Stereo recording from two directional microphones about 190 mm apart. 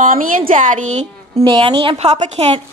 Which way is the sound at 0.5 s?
40° right (ahead or behind).